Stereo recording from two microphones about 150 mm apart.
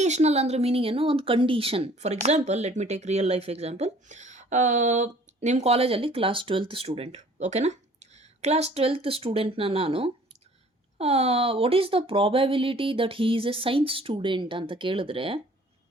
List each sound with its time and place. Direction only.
0.0 s a woman's voice: 50° right (ahead or behind)